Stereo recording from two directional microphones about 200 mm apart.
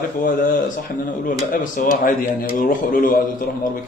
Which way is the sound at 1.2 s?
40° left (ahead or behind).